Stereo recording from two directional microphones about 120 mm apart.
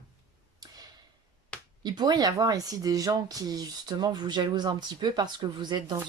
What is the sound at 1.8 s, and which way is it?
Speech, 35° right (ahead or behind).